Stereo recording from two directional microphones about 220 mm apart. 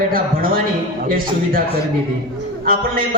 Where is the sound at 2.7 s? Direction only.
40° right (ahead or behind).